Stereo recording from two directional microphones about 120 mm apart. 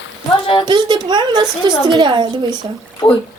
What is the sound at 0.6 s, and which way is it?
A child's voice, 40° right (ahead or behind).